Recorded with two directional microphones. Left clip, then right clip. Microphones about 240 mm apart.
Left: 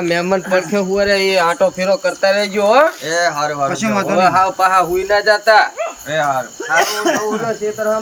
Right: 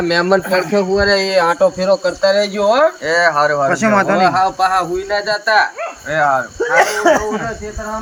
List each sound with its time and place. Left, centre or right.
0.1 s speech: centre
3.1 s speech: centre
4.2 s speech: centre
6.1 s speech: centre